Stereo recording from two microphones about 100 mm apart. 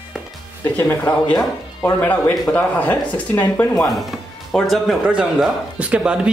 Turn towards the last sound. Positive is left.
turn(degrees=-10)  # may be behind; listen again after turning